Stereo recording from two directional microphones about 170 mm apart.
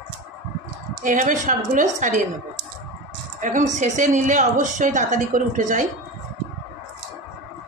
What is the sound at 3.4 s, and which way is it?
A woman's voice, 50° right (ahead or behind).